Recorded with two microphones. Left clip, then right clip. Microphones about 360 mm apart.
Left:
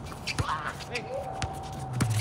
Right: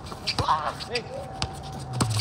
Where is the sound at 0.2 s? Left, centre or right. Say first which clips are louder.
Right 7 dB; centre.